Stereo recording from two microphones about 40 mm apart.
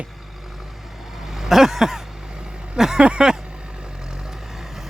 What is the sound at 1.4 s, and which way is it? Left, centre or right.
Vehicle, centre.